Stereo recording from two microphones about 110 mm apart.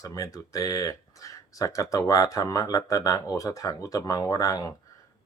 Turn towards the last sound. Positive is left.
turn(degrees=35)  # may be behind; listen again after turning